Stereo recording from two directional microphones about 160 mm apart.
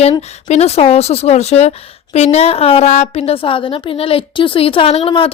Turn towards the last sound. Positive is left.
turn(degrees=35)  # may be behind; listen again after turning